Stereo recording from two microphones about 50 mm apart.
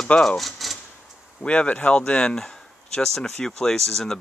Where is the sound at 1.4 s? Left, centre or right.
Left.